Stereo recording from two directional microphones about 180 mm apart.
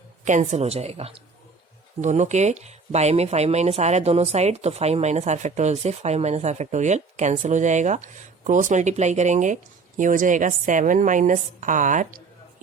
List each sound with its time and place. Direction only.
0.3 s a woman's voice: 40° right (ahead or behind)